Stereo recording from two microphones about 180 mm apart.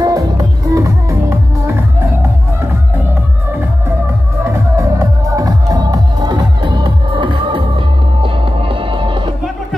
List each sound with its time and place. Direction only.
0.0 s music: 20° right (ahead or behind)
4.5 s music: 15° right (ahead or behind)